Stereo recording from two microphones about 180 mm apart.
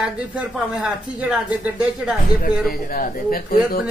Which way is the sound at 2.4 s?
50° left (ahead or behind).